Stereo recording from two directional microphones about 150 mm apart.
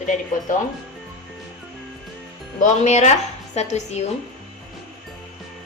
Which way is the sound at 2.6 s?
50° left (ahead or behind).